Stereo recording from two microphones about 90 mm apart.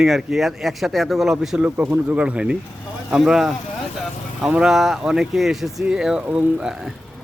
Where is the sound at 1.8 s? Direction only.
20° right (ahead or behind).